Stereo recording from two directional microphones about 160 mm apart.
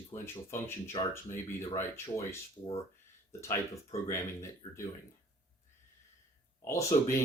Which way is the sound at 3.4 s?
15° left (ahead or behind).